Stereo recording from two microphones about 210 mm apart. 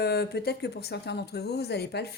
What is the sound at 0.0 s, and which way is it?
Speech, 50° left (ahead or behind).